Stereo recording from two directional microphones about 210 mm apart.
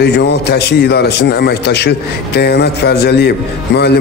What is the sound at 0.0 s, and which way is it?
A man's voice, 50° left (ahead or behind).